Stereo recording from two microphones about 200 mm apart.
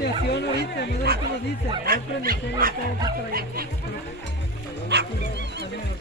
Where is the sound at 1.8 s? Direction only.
45° right (ahead or behind).